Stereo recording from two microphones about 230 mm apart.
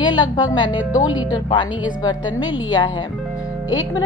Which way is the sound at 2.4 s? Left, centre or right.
Centre.